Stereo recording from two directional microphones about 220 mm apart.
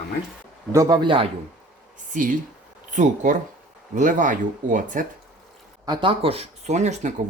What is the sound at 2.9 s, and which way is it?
Speech, 35° right (ahead or behind).